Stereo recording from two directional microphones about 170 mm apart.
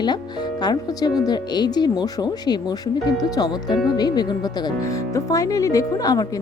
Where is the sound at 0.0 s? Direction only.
25° left (ahead or behind).